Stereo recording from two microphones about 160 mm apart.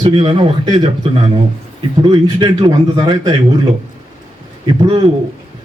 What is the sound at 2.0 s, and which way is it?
Speech, 25° right (ahead or behind).